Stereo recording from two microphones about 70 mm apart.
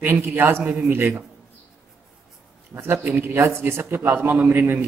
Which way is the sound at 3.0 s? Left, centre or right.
Right.